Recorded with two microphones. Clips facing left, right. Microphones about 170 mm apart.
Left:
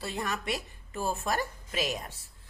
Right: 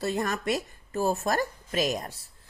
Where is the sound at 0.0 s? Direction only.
45° right (ahead or behind).